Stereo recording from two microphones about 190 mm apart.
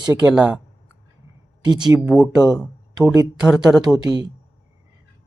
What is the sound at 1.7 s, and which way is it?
Speech, 20° right (ahead or behind).